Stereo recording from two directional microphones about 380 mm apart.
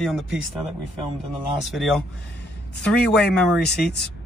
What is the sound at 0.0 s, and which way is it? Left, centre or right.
Speech, centre.